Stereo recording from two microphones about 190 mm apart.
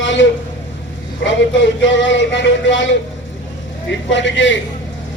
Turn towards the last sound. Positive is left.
turn(degrees=75)  # may be behind; listen again after turning